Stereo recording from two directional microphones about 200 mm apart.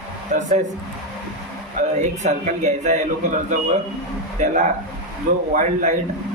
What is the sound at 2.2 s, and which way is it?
A man's voice, 35° right (ahead or behind).